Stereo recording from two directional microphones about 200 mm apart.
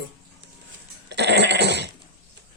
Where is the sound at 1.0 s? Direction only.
60° right (ahead or behind).